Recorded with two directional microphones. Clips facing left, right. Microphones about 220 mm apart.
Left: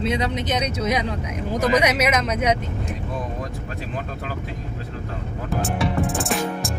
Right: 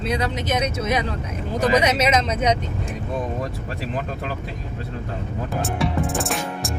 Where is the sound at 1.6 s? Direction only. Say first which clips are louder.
Right 1 dB; 30° right (ahead or behind).